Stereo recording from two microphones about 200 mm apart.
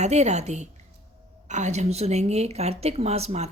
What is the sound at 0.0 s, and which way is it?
A woman's voice, 35° right (ahead or behind).